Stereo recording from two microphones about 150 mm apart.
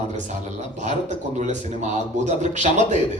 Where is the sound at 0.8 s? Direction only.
50° right (ahead or behind).